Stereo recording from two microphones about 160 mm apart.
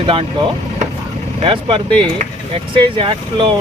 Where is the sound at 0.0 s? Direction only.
35° right (ahead or behind).